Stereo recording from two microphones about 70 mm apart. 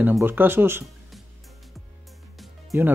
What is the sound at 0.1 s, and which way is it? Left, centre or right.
Speech, right.